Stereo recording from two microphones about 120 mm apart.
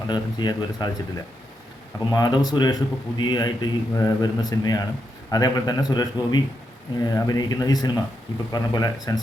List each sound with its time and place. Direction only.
0.1 s a man's voice: 35° left (ahead or behind)
2.0 s a man's voice: 35° left (ahead or behind)